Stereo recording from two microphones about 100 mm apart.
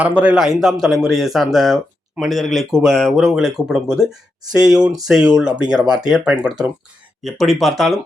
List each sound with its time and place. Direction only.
0.0 s speech: 10° right (ahead or behind)
7.2 s speech: centre (ahead or behind)